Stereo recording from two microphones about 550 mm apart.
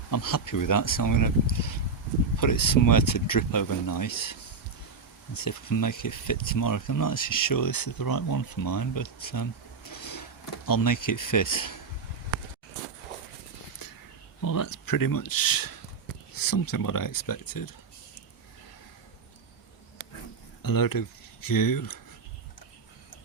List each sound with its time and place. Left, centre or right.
0.1 s speech: left
9.9 s a sound: left
10.7 s speech: left
14.4 s speech: left
20.6 s speech: left